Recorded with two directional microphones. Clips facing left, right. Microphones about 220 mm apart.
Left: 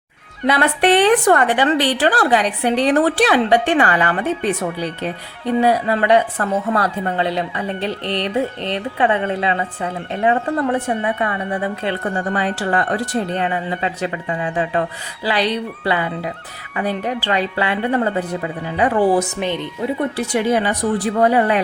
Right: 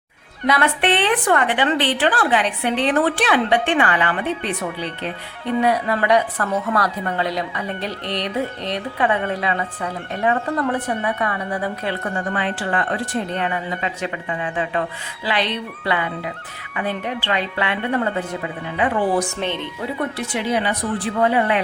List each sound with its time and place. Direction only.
0.4 s a woman's voice: 35° left (ahead or behind)
5.5 s a woman's voice: 30° left (ahead or behind)
19.2 s speech: 15° left (ahead or behind)
20.1 s a woman's voice: 45° left (ahead or behind)